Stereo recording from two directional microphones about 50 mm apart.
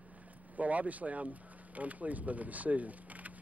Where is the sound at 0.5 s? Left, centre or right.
Right.